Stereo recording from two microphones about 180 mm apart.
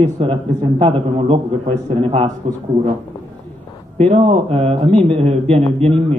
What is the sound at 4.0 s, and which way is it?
A man's voice, 30° right (ahead or behind).